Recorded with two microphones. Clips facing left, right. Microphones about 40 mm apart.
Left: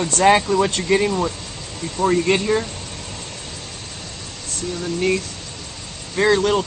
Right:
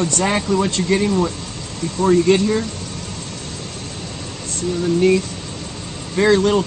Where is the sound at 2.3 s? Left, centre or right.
Centre.